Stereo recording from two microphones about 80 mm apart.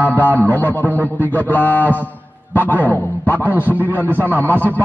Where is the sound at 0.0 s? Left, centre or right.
Left.